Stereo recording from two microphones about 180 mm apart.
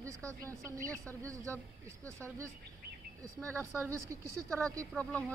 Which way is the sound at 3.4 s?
15° right (ahead or behind).